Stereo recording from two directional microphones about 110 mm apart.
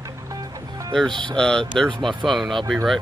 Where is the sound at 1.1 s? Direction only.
45° right (ahead or behind).